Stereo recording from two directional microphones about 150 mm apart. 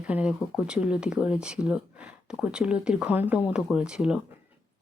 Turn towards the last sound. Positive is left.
turn(degrees=-5)  # may be behind; listen again after turning